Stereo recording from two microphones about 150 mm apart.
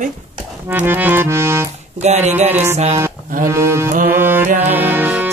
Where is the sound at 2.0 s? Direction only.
50° right (ahead or behind).